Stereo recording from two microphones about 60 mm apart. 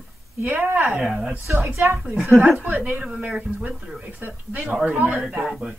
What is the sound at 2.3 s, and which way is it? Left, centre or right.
Speech, centre.